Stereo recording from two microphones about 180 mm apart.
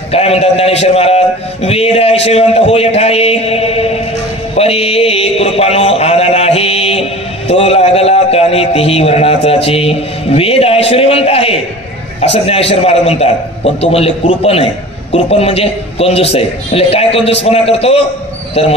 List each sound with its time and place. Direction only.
0.1 s a man's voice: 35° left (ahead or behind)
4.6 s a sound: 35° left (ahead or behind)
12.2 s a man's voice: 35° left (ahead or behind)